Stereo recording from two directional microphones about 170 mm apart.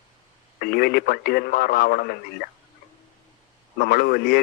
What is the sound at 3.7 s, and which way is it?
Speech, 60° left (ahead or behind).